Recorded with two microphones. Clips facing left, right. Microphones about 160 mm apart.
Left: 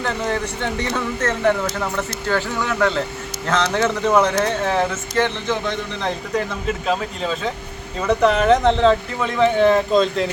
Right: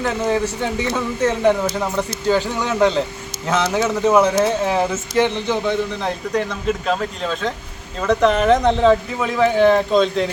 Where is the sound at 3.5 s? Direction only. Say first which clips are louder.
Right 1 dB; 10° right (ahead or behind).